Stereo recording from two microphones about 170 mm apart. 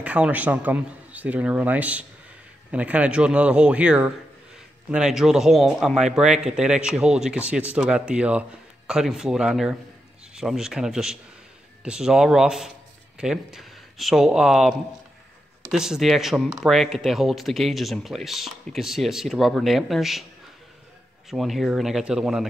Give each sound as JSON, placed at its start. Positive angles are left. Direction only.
{"t": 0.0, "sound": "speech", "side_deg": -10}
{"t": 21.3, "sound": "speech", "side_deg": 0}